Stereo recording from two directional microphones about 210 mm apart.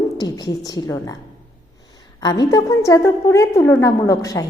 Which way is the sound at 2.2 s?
15° left (ahead or behind).